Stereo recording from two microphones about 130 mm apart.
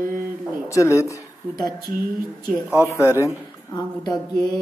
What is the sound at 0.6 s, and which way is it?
Speech, 20° left (ahead or behind).